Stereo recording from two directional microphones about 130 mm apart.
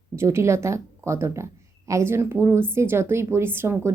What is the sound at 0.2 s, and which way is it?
A woman's voice, 20° right (ahead or behind).